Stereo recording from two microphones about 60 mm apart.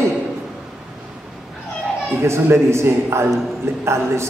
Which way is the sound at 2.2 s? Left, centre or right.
Right.